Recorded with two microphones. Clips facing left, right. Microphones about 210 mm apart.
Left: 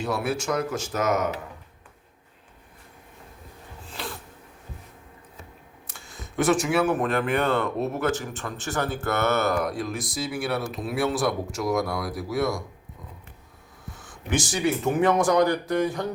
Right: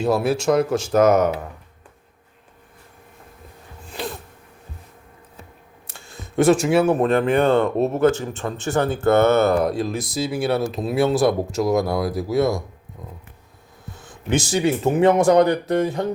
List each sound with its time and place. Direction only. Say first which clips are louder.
0.0 s speech: right 8 dB; 30° right (ahead or behind)
3.8 s a sound: right 7 dB; 15° right (ahead or behind)
5.9 s speech: right 8 dB; 25° right (ahead or behind)
14.0 s speech: right 5 dB; 25° right (ahead or behind)